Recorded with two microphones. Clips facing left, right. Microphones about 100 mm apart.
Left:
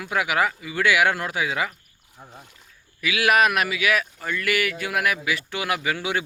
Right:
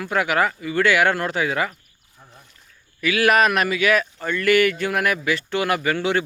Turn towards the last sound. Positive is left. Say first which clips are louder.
# right 5 dB
turn(degrees=10)  # may be behind; listen again after turning